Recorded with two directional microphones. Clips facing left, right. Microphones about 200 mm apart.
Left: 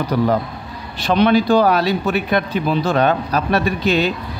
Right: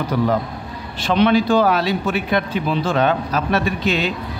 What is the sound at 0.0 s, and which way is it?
Speech, 40° left (ahead or behind).